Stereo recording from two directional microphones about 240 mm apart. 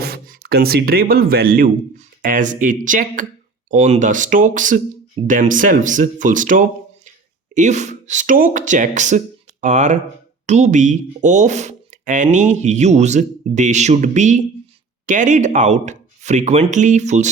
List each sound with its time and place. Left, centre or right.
0.0 s speech: right